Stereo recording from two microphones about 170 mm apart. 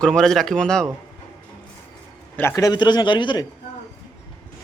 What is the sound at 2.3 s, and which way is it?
A man's voice, 15° left (ahead or behind).